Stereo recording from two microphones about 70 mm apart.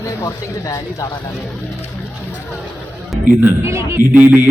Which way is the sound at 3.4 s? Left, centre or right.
Right.